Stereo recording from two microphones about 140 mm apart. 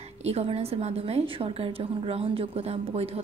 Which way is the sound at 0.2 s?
45° right (ahead or behind).